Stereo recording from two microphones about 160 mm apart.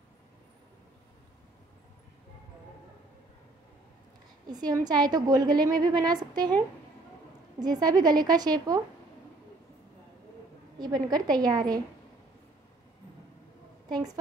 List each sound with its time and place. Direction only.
4.5 s a woman's voice: 25° right (ahead or behind)
7.5 s a woman's voice: 25° right (ahead or behind)
10.8 s a woman's voice: 25° right (ahead or behind)
13.8 s a woman's voice: 25° right (ahead or behind)